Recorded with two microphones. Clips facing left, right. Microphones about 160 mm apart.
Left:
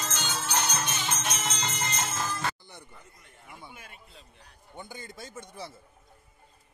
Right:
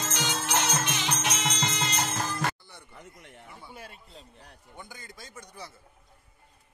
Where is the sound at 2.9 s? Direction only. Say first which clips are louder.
Right 6 dB; 75° right (ahead or behind).